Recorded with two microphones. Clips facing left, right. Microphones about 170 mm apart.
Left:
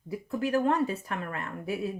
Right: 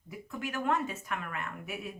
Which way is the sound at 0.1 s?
35° left (ahead or behind).